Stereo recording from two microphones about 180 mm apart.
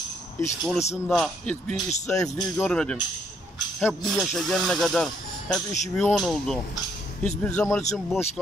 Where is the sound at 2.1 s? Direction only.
20° left (ahead or behind).